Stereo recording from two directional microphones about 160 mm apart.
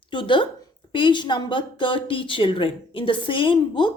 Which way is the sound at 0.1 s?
30° left (ahead or behind).